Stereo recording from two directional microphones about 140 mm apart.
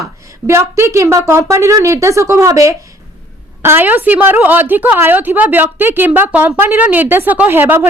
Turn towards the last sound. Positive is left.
turn(degrees=-15)  # may be behind; listen again after turning